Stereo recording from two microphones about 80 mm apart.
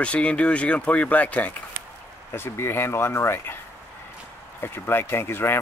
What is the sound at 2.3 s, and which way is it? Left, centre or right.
Speech, left.